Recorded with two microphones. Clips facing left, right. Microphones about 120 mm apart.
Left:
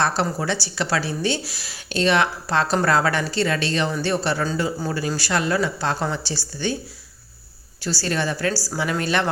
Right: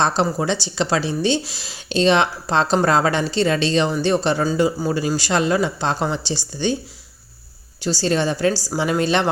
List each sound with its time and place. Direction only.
0.0 s speech: 20° right (ahead or behind)
7.8 s speech: 20° right (ahead or behind)